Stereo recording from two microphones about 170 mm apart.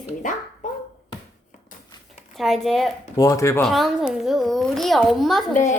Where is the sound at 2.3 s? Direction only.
Centre (ahead or behind).